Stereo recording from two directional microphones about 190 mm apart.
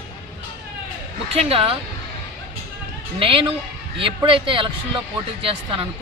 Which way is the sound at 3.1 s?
30° right (ahead or behind).